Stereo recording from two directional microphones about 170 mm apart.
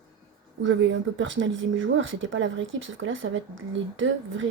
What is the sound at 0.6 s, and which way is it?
Speech, 90° right.